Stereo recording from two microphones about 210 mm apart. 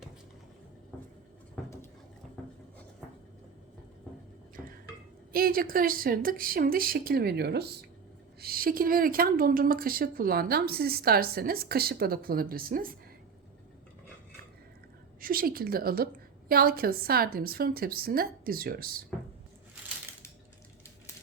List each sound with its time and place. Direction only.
5.3 s a woman's voice: 45° right (ahead or behind)
15.2 s a woman's voice: 45° right (ahead or behind)